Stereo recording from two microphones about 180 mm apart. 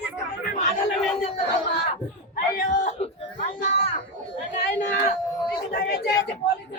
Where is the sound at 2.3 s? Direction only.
50° left (ahead or behind).